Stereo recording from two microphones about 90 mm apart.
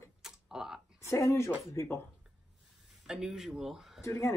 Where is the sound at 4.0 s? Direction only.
30° left (ahead or behind).